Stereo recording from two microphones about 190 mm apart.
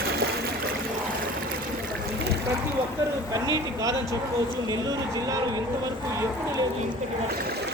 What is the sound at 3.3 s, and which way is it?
Speech, 20° right (ahead or behind).